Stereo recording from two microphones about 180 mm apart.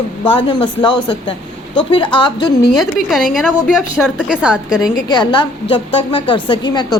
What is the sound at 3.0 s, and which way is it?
A woman's voice, centre (ahead or behind).